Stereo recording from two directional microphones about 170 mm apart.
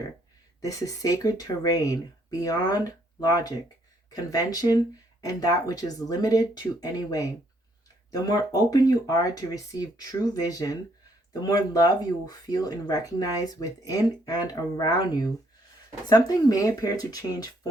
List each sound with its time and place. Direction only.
0.6 s speech: 20° left (ahead or behind)